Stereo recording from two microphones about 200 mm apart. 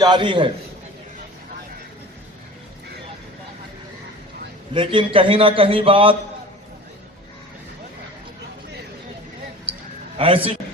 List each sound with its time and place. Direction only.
0.0 s a man's voice: 20° right (ahead or behind)
4.7 s a man's voice: 25° right (ahead or behind)
10.2 s a man's voice: 25° right (ahead or behind)